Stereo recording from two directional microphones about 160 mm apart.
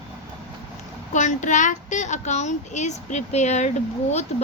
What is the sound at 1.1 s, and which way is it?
A woman's voice, 50° left (ahead or behind).